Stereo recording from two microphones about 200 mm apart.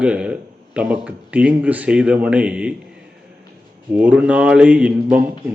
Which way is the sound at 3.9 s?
5° right (ahead or behind).